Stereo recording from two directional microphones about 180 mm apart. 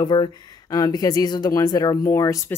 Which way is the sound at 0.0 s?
25° left (ahead or behind).